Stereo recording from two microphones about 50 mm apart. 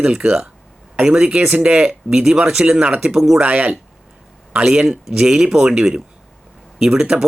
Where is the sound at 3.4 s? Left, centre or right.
Right.